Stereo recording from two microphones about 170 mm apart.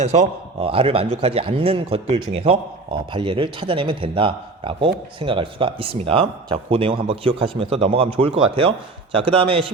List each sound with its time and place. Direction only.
0.0 s a man's voice: 40° right (ahead or behind)